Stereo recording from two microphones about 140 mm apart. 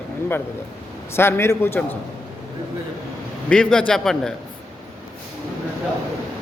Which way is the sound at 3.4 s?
5° left (ahead or behind).